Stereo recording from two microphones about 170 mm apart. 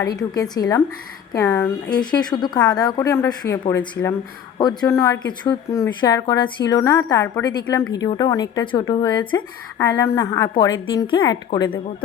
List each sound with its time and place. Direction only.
0.0 s a woman's voice: 20° left (ahead or behind)
2.0 s a woman's voice: 25° left (ahead or behind)
5.2 s a woman's voice: 25° left (ahead or behind)
9.7 s a woman's voice: 15° left (ahead or behind)
10.5 s a woman's voice: 30° left (ahead or behind)